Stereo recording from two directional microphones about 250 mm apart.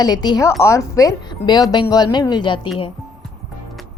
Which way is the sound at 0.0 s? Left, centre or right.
Centre.